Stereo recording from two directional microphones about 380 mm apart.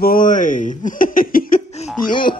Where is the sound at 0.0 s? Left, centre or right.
Left.